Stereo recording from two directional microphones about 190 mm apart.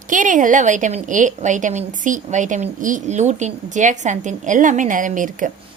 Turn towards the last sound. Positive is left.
turn(degrees=-45)  # may be behind; listen again after turning